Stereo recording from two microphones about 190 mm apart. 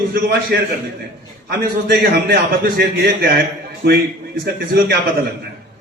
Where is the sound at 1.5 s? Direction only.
55° right (ahead or behind).